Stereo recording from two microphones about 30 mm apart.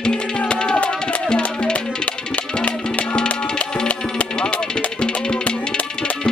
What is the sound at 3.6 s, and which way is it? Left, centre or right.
Music, left.